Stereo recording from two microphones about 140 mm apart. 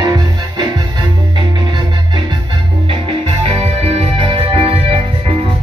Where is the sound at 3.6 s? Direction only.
45° right (ahead or behind).